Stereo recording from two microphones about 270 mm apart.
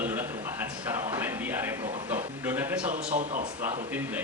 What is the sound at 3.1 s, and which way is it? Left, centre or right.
Speech, right.